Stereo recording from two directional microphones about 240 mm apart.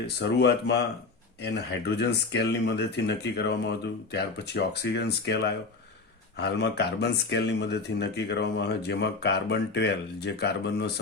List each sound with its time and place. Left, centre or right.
0.2 s speech: left